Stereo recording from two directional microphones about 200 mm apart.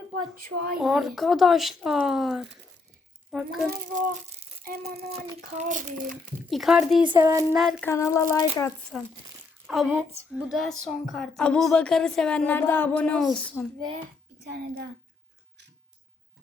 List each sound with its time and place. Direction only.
0.8 s speech: centre (ahead or behind)
3.7 s a child's voice: 35° right (ahead or behind)
4.8 s a sound: 30° right (ahead or behind)
6.5 s speech: centre (ahead or behind)
7.1 s child singing: 15° right (ahead or behind)
7.6 s speech: centre (ahead or behind)
7.9 s speech: 15° left (ahead or behind)
8.9 s speech: centre (ahead or behind)